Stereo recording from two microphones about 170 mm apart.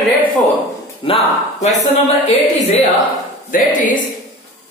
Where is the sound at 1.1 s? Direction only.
35° left (ahead or behind).